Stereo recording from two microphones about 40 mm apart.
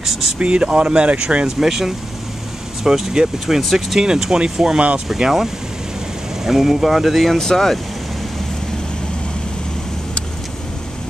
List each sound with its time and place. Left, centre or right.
0.0 s vehicle: centre
0.4 s speech: right
1.6 s speech: centre
4.7 s speech: right
5.0 s speech: centre
7.3 s speech: centre